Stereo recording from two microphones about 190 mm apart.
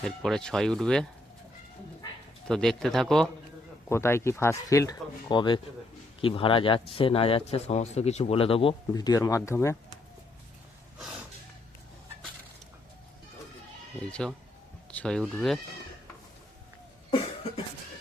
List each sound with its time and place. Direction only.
0.0 s speech: centre (ahead or behind)
2.5 s speech: 5° left (ahead or behind)
3.8 s speech: 15° left (ahead or behind); by 8.7 s 30° left (ahead or behind)
8.9 s speech: 20° left (ahead or behind)
14.1 s speech: 5° left (ahead or behind)